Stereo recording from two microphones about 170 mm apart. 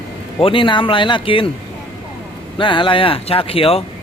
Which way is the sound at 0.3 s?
30° left (ahead or behind).